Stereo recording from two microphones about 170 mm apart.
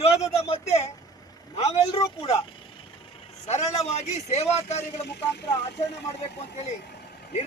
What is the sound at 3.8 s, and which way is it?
Speech, 40° left (ahead or behind).